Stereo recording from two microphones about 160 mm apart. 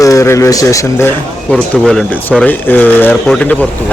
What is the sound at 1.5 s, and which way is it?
Speech, 5° left (ahead or behind).